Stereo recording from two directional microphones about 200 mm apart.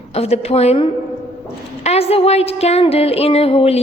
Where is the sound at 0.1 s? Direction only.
30° left (ahead or behind).